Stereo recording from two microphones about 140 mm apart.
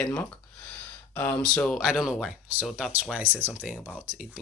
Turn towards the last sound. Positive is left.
turn(degrees=-5)  # may be behind; listen again after turning